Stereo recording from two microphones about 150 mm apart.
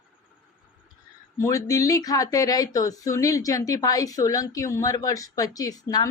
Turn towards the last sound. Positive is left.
turn(degrees=25)  # may be behind; listen again after turning